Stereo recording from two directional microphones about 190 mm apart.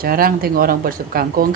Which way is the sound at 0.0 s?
50° right (ahead or behind).